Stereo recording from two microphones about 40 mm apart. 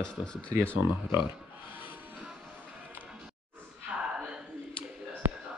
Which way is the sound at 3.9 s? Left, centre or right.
Right.